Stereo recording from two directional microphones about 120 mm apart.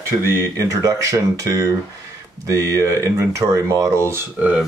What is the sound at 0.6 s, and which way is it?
Speech, 30° right (ahead or behind).